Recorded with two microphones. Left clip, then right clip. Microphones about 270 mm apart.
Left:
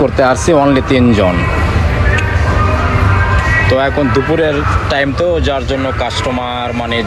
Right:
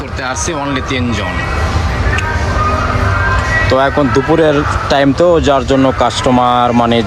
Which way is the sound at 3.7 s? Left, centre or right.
Centre.